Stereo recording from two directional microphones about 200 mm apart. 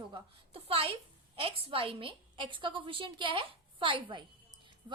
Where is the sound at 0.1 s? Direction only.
30° right (ahead or behind).